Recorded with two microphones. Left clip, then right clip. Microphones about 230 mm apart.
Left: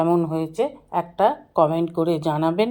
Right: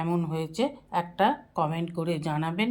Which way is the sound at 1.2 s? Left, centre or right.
Centre.